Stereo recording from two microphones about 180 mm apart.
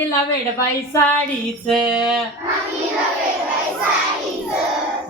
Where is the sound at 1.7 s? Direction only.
5° right (ahead or behind).